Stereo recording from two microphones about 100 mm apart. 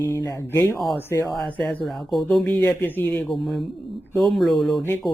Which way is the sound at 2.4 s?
15° left (ahead or behind).